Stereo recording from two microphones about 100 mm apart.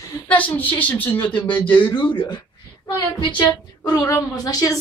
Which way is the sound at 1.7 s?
50° left (ahead or behind).